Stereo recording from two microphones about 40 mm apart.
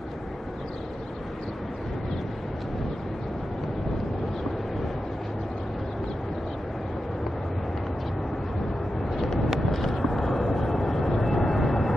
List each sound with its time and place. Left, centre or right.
9.5 s vehicle: centre